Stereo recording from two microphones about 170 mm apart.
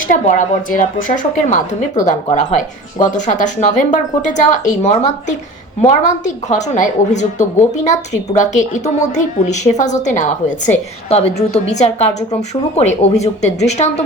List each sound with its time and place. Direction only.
0.1 s a woman's voice: 50° left (ahead or behind)